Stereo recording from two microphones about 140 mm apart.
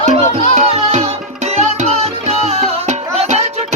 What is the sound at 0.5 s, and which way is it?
Music, 50° right (ahead or behind).